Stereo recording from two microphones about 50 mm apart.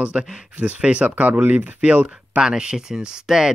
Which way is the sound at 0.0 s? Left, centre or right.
Centre.